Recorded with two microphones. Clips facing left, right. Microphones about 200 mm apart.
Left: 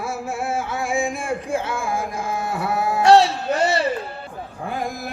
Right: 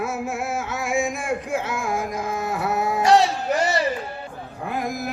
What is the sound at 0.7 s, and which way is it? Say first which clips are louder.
Music: right 2 dB; 30° left (ahead or behind).